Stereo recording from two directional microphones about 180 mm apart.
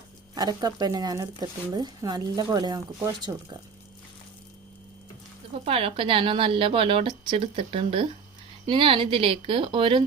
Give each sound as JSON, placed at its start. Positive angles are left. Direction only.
{"t": 0.3, "sound": "speech", "side_deg": -20}
{"t": 5.6, "sound": "speech", "side_deg": -30}